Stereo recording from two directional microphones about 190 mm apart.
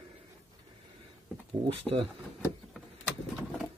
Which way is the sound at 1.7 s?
30° right (ahead or behind).